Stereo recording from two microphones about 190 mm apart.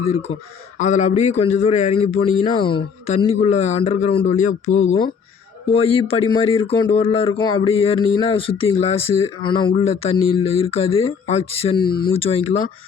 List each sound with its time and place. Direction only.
0.0 s speech: 35° left (ahead or behind)